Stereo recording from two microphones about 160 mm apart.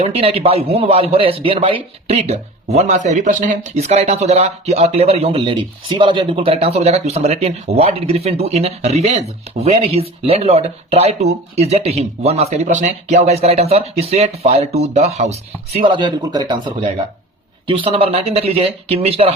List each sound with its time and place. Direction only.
0.0 s a man's voice: 40° right (ahead or behind)